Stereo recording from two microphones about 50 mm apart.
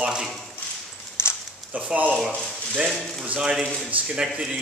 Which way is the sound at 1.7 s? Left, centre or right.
Right.